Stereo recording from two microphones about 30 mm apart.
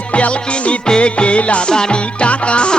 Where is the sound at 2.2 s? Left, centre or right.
Left.